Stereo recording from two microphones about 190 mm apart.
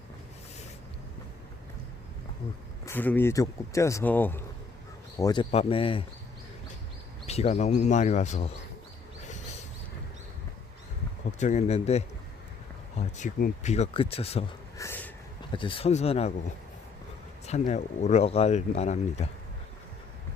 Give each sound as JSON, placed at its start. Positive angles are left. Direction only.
{"t": 2.8, "sound": "speech", "side_deg": 10}
{"t": 5.2, "sound": "speech", "side_deg": 25}
{"t": 7.3, "sound": "speech", "side_deg": 35}
{"t": 11.3, "sound": "speech", "side_deg": 40}
{"t": 14.8, "sound": "a sound", "side_deg": 10}
{"t": 15.5, "sound": "speech", "side_deg": 25}
{"t": 17.7, "sound": "speech", "side_deg": 35}